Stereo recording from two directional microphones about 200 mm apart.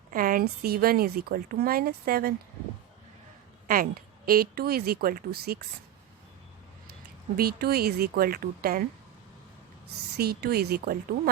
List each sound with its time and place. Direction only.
0.1 s a sound: 45° right (ahead or behind)
0.6 s speech: 50° right (ahead or behind)
3.7 s speech: 45° right (ahead or behind)
7.3 s speech: 50° right (ahead or behind)
10.2 s speech: 50° right (ahead or behind)